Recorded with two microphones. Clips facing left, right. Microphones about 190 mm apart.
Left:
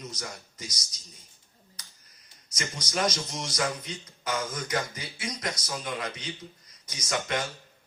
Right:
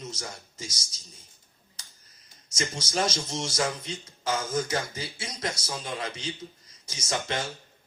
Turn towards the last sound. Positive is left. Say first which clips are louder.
# left 1 dB
turn(degrees=-25)  # may be behind; listen again after turning